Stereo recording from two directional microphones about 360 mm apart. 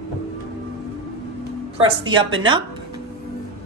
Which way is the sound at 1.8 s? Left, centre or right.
Centre.